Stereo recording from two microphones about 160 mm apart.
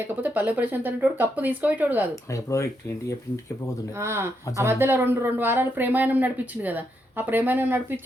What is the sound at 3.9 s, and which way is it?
Speech, 15° right (ahead or behind).